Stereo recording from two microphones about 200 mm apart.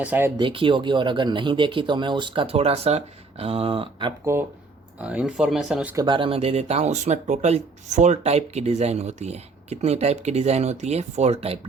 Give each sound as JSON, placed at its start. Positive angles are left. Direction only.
{"t": 0.0, "sound": "speech", "side_deg": -10}
{"t": 0.3, "sound": "speech", "side_deg": -25}
{"t": 4.9, "sound": "speech", "side_deg": -5}
{"t": 6.0, "sound": "speech", "side_deg": -25}